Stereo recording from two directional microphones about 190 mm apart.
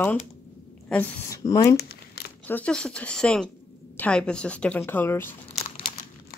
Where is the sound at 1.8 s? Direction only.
55° left (ahead or behind).